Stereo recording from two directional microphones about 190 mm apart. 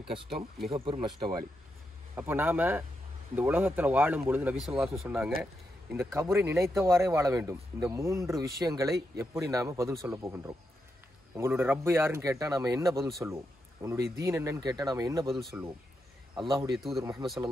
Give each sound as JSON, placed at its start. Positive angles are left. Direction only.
{"t": 0.1, "sound": "speech", "side_deg": -30}
{"t": 2.1, "sound": "speech", "side_deg": -10}
{"t": 15.3, "sound": "speech", "side_deg": 0}
{"t": 17.0, "sound": "speech", "side_deg": -20}